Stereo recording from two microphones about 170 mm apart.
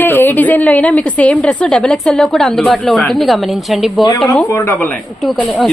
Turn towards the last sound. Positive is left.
turn(degrees=5)  # may be behind; listen again after turning